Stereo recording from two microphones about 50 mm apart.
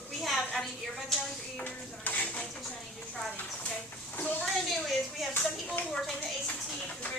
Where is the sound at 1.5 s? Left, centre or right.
Left.